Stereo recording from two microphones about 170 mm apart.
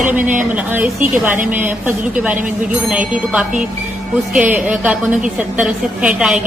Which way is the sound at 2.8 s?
5° right (ahead or behind).